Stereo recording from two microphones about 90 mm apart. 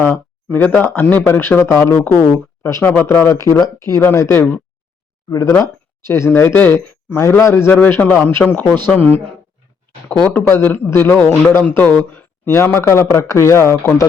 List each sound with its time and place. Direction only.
0.0 s speech: 20° left (ahead or behind)
7.8 s speech: 15° left (ahead or behind)
10.2 s speech: 20° left (ahead or behind)